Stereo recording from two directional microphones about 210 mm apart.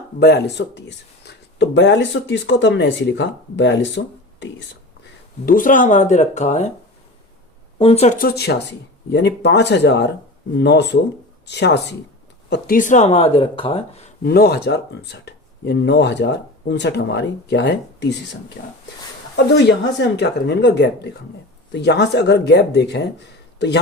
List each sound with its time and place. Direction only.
0.2 s speech: 50° left (ahead or behind)
5.5 s speech: 40° left (ahead or behind)
7.8 s speech: 30° left (ahead or behind); by 11.9 s 55° left (ahead or behind)
12.5 s speech: 40° left (ahead or behind)
14.3 s speech: 45° left (ahead or behind)
19.6 s a man's voice: 55° left (ahead or behind)